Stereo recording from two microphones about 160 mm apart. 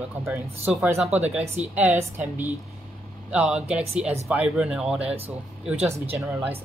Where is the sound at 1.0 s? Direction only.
40° right (ahead or behind).